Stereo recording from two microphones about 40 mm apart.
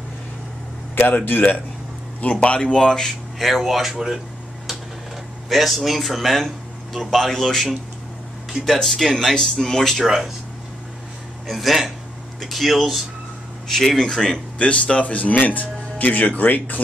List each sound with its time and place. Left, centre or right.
1.0 s speech: left
2.4 s speech: left
3.3 s speech: centre
5.5 s speech: centre
8.6 s speech: centre
10.0 s speech: centre
11.4 s speech: centre
13.7 s speech: centre
14.6 s speech: left